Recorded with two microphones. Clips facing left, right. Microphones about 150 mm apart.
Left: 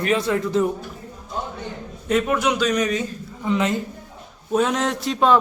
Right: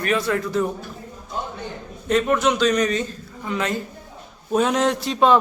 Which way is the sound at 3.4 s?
20° left (ahead or behind).